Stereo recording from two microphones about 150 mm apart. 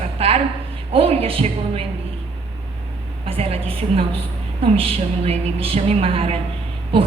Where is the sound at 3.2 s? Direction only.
40° right (ahead or behind).